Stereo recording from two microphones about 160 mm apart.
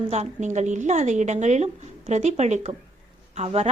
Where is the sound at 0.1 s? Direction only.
45° right (ahead or behind).